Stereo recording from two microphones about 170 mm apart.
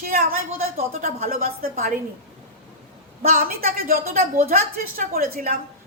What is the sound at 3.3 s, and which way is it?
A woman's voice, 55° right (ahead or behind).